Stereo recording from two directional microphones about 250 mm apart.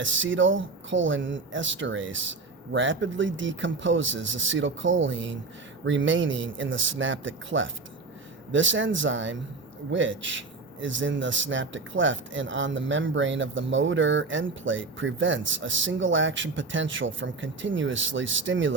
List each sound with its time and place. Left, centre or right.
0.0 s speech: right